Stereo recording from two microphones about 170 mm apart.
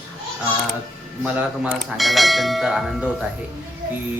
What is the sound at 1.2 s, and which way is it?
Speech, 5° right (ahead or behind).